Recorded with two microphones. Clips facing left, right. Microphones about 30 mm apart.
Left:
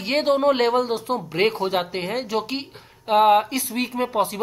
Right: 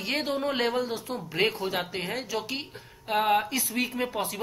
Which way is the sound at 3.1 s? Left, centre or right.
Left.